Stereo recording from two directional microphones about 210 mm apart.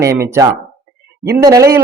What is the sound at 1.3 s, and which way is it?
Speech, 15° right (ahead or behind).